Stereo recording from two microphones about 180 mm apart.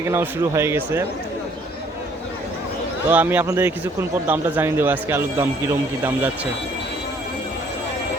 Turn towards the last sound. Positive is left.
turn(degrees=-15)  # may be behind; listen again after turning